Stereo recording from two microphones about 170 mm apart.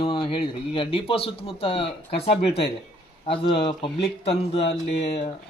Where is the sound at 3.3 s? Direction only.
30° left (ahead or behind).